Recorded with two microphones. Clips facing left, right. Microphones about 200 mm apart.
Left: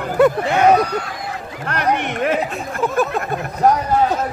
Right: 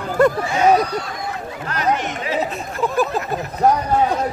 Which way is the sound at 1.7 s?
60° left (ahead or behind).